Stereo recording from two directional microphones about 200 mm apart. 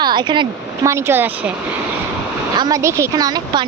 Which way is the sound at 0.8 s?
15° right (ahead or behind).